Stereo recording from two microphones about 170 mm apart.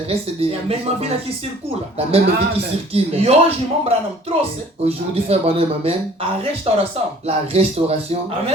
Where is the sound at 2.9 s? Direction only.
35° right (ahead or behind).